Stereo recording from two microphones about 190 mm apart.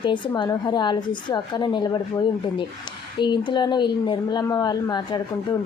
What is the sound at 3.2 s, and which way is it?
A woman's voice, 25° left (ahead or behind).